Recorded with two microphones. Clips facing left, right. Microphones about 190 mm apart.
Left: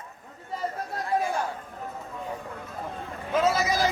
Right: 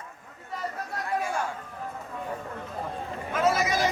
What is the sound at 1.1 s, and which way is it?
Chatter, 35° left (ahead or behind).